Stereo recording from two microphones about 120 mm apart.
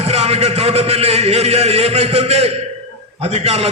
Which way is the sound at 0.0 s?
60° right (ahead or behind).